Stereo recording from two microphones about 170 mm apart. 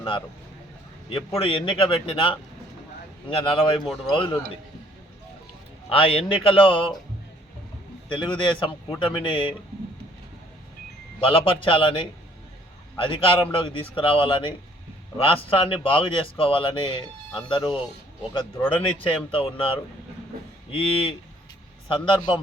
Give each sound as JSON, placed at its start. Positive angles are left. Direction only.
{"t": 1.4, "sound": "a man's voice", "side_deg": 30}
{"t": 3.8, "sound": "a man's voice", "side_deg": 0}
{"t": 4.1, "sound": "a man's voice", "side_deg": 30}
{"t": 5.9, "sound": "speech", "side_deg": 35}
{"t": 8.1, "sound": "a man's voice", "side_deg": 30}
{"t": 11.2, "sound": "speech", "side_deg": 30}
{"t": 18.7, "sound": "speech", "side_deg": 30}